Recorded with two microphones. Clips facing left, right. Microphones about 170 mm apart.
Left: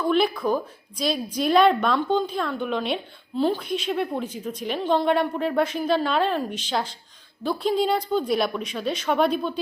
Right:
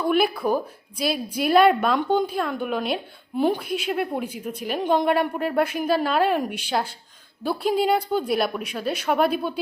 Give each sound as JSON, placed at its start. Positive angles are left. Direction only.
{"t": 0.0, "sound": "a woman's voice", "side_deg": -10}